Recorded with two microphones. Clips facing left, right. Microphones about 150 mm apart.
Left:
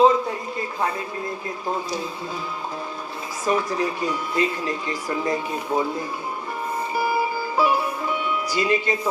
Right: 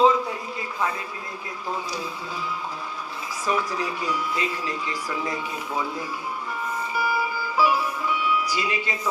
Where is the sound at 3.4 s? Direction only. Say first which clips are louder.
Left 4 dB; 45° left (ahead or behind).